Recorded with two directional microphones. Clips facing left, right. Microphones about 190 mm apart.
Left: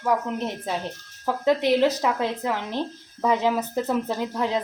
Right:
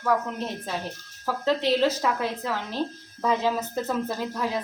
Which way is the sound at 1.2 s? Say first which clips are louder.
Left 3 dB; 15° left (ahead or behind).